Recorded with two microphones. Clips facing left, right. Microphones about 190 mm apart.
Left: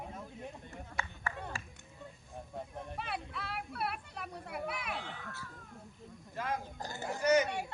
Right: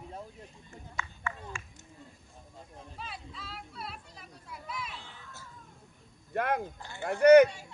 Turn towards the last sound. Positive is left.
turn(degrees=-60)  # may be behind; listen again after turning